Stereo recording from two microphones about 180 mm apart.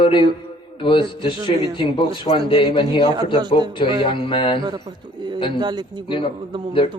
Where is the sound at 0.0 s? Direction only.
25° left (ahead or behind).